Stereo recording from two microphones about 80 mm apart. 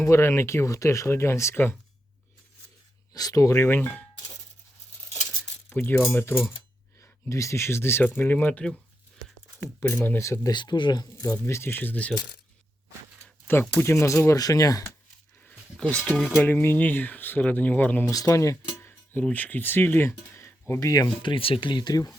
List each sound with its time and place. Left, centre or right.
0.0 s speech: left
3.1 s speech: left
3.5 s speech: left
5.7 s speech: left
9.8 s speech: left
10.5 s speech: left
11.4 s speech: left
13.5 s speech: left
15.8 s speech: centre
16.4 s speech: left
18.1 s speech: left
19.3 s speech: left
21.2 s speech: left